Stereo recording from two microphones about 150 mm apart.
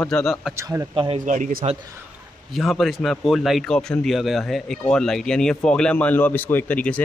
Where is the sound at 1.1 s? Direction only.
55° right (ahead or behind).